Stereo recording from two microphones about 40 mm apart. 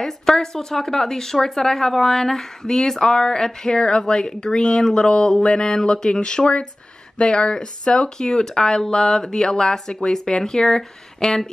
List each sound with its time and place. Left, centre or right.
0.0 s speech: centre